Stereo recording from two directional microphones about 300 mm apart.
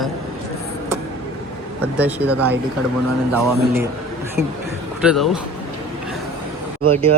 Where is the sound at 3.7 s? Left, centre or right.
Centre.